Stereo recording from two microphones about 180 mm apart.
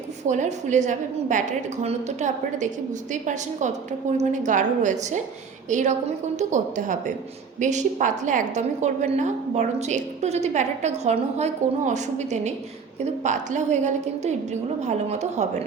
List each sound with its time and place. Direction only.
0.3 s a woman's voice: 40° right (ahead or behind)